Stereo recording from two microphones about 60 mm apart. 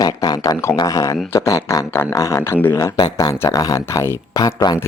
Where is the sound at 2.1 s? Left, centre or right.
Left.